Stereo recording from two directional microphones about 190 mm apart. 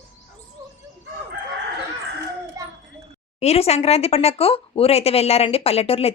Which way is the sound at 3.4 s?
35° left (ahead or behind).